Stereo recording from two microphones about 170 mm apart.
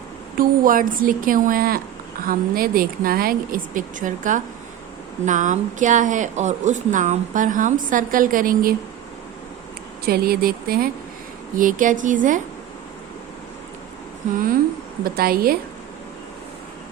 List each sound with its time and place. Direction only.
0.3 s a woman's voice: 55° right (ahead or behind)
10.1 s a woman's voice: 60° right (ahead or behind)
15.0 s a woman's voice: 65° right (ahead or behind)